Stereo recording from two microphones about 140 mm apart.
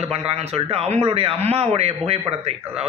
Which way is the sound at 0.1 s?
45° right (ahead or behind).